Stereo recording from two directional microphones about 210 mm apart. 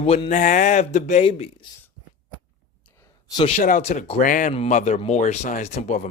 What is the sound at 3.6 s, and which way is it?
Speech, 35° left (ahead or behind).